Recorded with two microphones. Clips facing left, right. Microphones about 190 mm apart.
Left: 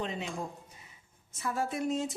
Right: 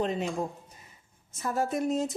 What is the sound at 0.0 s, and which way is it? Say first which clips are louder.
Speech: right 7 dB; 45° right (ahead or behind).